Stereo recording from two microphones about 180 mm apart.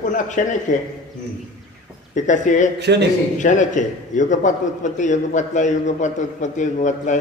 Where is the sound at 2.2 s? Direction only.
45° left (ahead or behind).